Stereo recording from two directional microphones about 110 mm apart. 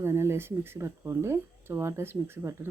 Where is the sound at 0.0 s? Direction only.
25° right (ahead or behind).